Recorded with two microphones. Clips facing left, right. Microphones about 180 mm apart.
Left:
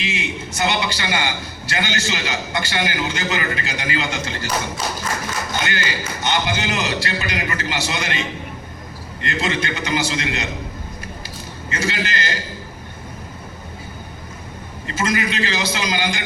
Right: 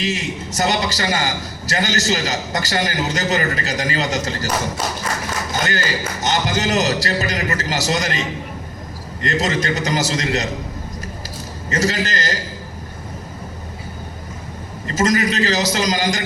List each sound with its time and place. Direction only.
0.0 s a man's voice: 40° right (ahead or behind)
9.2 s a man's voice: 40° right (ahead or behind)
11.7 s a man's voice: 40° right (ahead or behind)
14.8 s a man's voice: 40° right (ahead or behind)